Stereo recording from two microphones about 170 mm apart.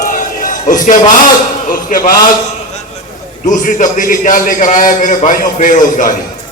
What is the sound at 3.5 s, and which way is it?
Speech, 50° left (ahead or behind).